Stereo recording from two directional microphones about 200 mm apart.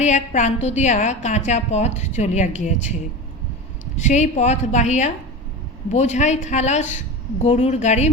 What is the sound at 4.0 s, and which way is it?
A woman's voice, 35° left (ahead or behind).